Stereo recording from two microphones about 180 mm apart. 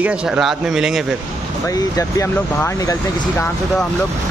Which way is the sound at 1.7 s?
20° left (ahead or behind).